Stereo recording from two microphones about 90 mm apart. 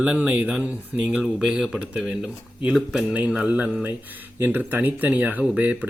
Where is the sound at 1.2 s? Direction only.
Centre (ahead or behind).